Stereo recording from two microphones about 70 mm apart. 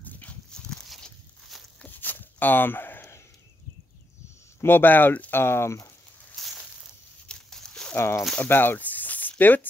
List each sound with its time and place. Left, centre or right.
0.0 s horse: left
0.5 s walk: centre
1.8 s a sound: left
4.6 s speech: left
5.3 s speech: left
6.4 s a sound: centre
7.9 s speech: left
8.4 s snake: left
9.4 s speech: left